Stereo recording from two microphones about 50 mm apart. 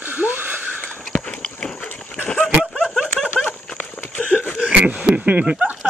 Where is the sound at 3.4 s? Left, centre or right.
Centre.